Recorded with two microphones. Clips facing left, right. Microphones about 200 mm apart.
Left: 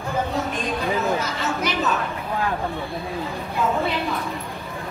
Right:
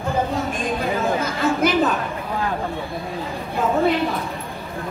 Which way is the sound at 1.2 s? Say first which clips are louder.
Right 6 dB; 55° right (ahead or behind).